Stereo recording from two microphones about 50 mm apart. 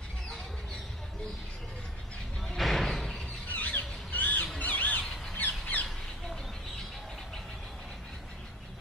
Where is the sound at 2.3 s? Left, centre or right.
Centre.